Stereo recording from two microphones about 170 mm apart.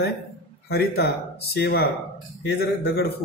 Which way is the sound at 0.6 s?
70° left (ahead or behind).